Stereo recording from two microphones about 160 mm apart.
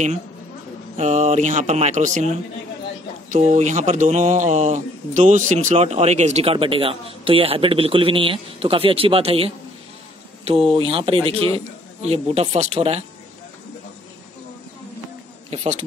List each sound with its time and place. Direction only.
0.9 s speech: 45° right (ahead or behind)
3.3 s speech: 45° right (ahead or behind)
15.5 s speech: 40° right (ahead or behind)